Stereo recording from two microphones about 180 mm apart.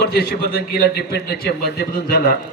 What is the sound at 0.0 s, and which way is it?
A man's voice, 60° left (ahead or behind).